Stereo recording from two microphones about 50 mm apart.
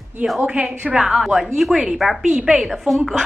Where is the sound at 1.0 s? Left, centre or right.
Centre.